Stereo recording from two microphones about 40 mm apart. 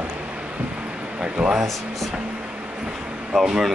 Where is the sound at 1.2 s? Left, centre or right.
Right.